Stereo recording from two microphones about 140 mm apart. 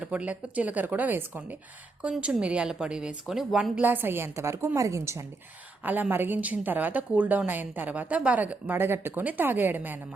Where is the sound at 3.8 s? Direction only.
15° right (ahead or behind).